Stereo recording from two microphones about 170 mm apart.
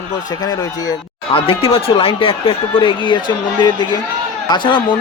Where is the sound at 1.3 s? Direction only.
35° left (ahead or behind).